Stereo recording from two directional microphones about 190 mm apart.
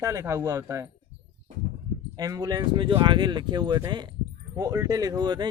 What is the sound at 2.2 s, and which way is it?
Speech, 20° right (ahead or behind).